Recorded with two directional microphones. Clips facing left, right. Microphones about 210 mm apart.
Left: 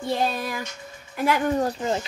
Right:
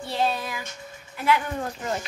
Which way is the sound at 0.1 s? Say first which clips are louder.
Left 1 dB; 45° left (ahead or behind).